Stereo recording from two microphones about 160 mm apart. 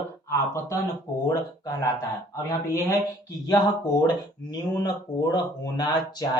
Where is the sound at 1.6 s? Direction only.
20° left (ahead or behind).